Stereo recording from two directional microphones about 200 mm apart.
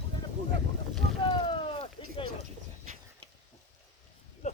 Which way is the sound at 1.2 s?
25° left (ahead or behind).